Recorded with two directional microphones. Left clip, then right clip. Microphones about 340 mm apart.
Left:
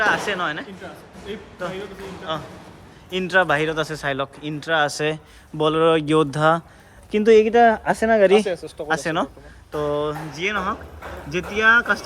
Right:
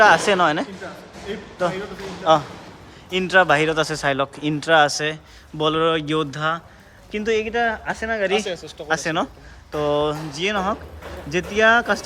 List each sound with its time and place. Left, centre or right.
0.0 s speech: centre
8.9 s speech: centre